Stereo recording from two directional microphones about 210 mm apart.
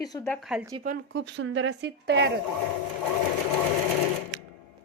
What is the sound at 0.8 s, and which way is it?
A woman's voice, 50° right (ahead or behind).